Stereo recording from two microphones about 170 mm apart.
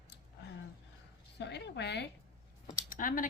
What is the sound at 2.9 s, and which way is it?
Speech, 50° left (ahead or behind).